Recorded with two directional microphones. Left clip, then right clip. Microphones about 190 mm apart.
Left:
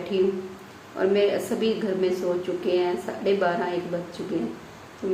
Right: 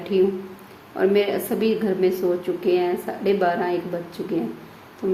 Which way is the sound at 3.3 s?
45° right (ahead or behind).